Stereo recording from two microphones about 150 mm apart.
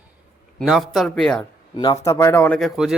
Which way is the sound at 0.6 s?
Centre (ahead or behind).